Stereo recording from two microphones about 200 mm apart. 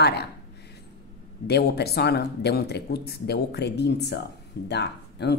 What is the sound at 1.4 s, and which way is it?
Speech, 55° left (ahead or behind).